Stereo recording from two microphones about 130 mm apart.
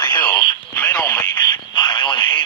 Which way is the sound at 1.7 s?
40° left (ahead or behind).